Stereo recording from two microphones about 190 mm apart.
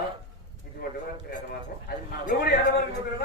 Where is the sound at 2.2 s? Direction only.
55° left (ahead or behind).